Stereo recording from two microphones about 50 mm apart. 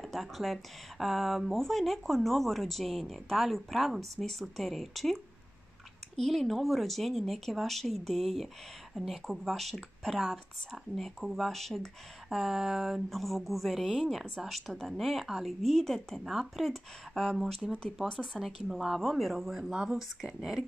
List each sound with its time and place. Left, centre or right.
0.0 s speech: centre
12.3 s speech: centre
15.7 s speech: centre
19.7 s speech: centre
20.0 s speech: centre